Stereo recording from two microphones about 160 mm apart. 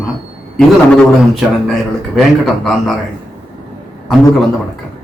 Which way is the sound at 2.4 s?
Centre (ahead or behind).